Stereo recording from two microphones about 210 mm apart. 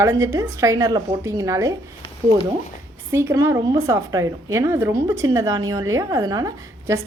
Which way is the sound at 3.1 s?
15° right (ahead or behind).